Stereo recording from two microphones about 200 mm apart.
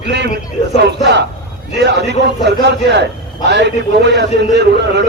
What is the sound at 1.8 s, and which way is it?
A man's voice, 60° right (ahead or behind).